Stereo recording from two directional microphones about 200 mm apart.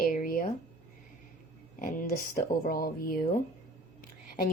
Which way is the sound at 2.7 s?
45° left (ahead or behind).